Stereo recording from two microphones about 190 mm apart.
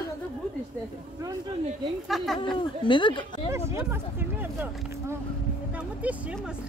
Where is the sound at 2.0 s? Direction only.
Centre (ahead or behind).